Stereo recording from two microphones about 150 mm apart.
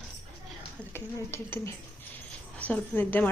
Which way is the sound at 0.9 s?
15° left (ahead or behind).